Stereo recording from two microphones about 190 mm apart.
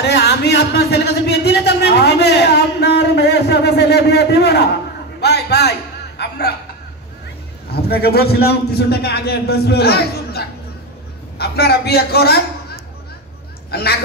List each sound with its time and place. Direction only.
0.0 s a sound: 60° left (ahead or behind)
5.2 s a man's voice: 60° left (ahead or behind)
6.1 s hiccup: 60° left (ahead or behind)
7.7 s a man's voice: 55° left (ahead or behind)
13.7 s speech: 55° left (ahead or behind)